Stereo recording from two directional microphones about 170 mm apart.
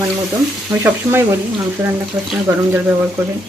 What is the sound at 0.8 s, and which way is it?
Speech, 15° right (ahead or behind).